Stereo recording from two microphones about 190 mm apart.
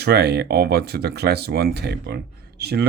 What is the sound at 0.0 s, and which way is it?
Speech, 60° right (ahead or behind).